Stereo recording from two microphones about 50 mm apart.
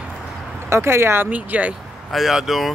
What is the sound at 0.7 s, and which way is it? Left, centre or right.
Speech, right.